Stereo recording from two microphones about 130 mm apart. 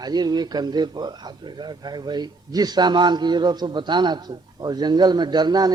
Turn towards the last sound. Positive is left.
turn(degrees=-30)  # may be behind; listen again after turning